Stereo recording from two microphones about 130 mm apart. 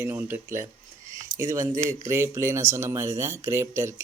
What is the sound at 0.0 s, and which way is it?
Speech, 15° right (ahead or behind).